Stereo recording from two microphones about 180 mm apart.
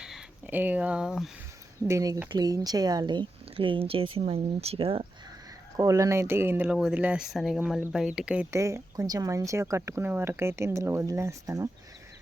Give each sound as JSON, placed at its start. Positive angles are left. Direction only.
{"t": 0.0, "sound": "speech", "side_deg": -5}
{"t": 1.9, "sound": "speech", "side_deg": -15}
{"t": 5.7, "sound": "speech", "side_deg": -20}
{"t": 8.5, "sound": "speech", "side_deg": -15}